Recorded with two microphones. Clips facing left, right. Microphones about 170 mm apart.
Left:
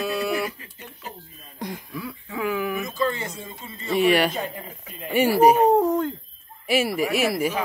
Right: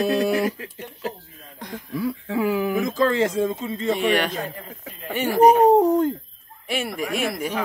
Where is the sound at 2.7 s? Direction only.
90° right.